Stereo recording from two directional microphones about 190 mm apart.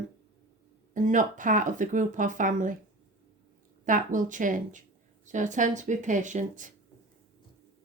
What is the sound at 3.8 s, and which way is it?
Speech, 45° right (ahead or behind).